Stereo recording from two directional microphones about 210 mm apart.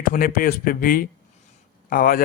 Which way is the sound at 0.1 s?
40° left (ahead or behind).